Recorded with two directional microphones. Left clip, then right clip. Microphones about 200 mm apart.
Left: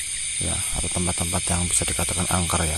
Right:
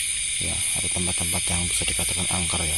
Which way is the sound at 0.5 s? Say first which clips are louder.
Right 1 dB; 25° left (ahead or behind).